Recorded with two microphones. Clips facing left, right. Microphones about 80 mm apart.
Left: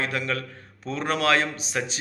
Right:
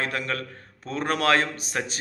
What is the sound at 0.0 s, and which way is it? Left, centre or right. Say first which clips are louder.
A man's voice: left 1 dB; right.